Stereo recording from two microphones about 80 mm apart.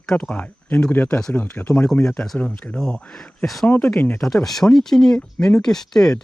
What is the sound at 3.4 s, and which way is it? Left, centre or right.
Speech, centre.